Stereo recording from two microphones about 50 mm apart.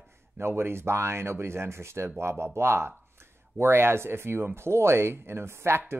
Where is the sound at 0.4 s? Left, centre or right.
Right.